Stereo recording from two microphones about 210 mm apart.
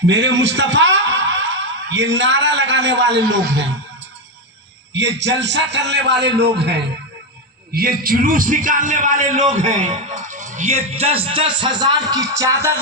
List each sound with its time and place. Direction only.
0.1 s speech: 60° right (ahead or behind)
4.9 s a man's voice: 55° right (ahead or behind); by 12.7 s 15° right (ahead or behind)